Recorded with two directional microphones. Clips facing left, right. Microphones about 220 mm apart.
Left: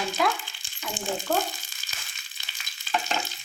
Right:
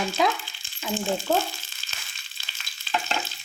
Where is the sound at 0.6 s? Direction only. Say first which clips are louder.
Right 7 dB; 15° left (ahead or behind).